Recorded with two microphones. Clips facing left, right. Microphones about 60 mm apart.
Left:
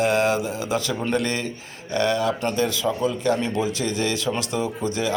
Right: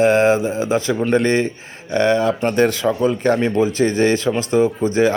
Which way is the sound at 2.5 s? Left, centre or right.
Right.